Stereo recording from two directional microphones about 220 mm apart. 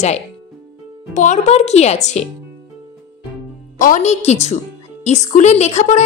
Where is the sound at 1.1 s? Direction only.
35° left (ahead or behind).